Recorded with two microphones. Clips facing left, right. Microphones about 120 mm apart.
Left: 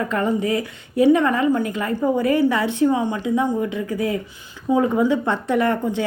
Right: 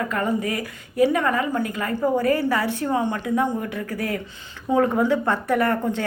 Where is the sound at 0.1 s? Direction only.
25° left (ahead or behind).